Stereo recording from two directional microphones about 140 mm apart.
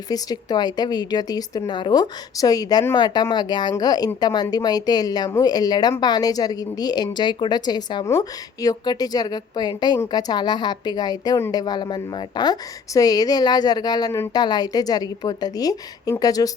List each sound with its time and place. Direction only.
0.1 s a woman's voice: 30° left (ahead or behind)